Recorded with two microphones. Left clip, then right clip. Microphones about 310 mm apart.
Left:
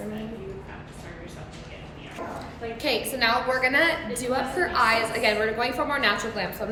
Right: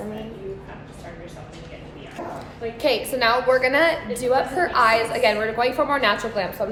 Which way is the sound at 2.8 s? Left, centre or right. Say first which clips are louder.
Right 4 dB; centre.